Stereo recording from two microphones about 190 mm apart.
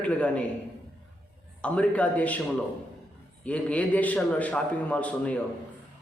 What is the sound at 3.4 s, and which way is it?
A man's voice, 5° left (ahead or behind).